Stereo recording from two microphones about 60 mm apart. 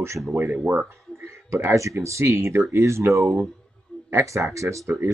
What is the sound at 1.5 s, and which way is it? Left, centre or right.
Speech, right.